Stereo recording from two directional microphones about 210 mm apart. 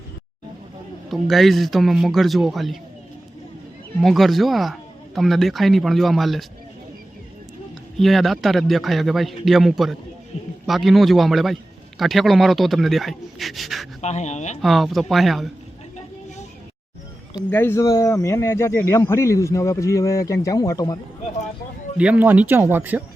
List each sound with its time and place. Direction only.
1.1 s speech: centre (ahead or behind)
4.0 s speech: centre (ahead or behind)
7.9 s speech: centre (ahead or behind)
14.0 s speech: 35° left (ahead or behind)
14.6 s speech: centre (ahead or behind)
17.3 s speech: 10° left (ahead or behind)
21.9 s speech: 5° right (ahead or behind)